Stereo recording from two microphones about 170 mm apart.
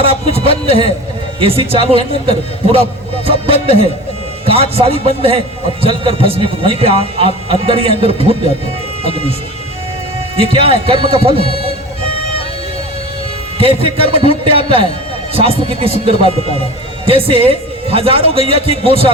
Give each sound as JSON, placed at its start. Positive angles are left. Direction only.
{"t": 0.0, "sound": "a man's voice", "side_deg": -35}
{"t": 10.5, "sound": "a man's voice", "side_deg": -35}
{"t": 13.6, "sound": "a man's voice", "side_deg": -35}